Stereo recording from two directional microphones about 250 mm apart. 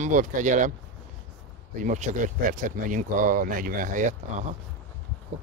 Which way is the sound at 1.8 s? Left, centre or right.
Right.